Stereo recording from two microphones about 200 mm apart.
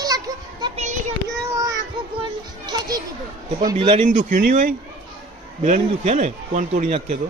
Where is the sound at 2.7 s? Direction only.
20° right (ahead or behind).